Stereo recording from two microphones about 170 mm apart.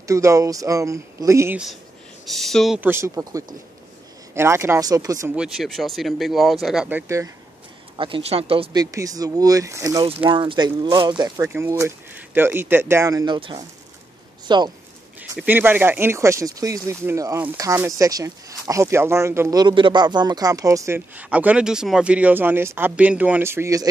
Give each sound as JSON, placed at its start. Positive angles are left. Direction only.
{"t": 0.0, "sound": "speech", "side_deg": -20}
{"t": 2.2, "sound": "speech", "side_deg": 0}
{"t": 2.8, "sound": "speech", "side_deg": -15}
{"t": 5.3, "sound": "speech", "side_deg": -5}
{"t": 8.0, "sound": "speech", "side_deg": -35}
{"t": 8.7, "sound": "speech", "side_deg": -20}
{"t": 10.0, "sound": "speech", "side_deg": -30}
{"t": 15.1, "sound": "speech", "side_deg": -10}